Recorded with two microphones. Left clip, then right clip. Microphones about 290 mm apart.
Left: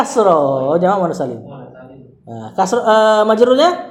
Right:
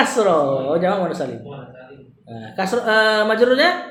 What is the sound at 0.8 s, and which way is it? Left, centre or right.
Speech, left.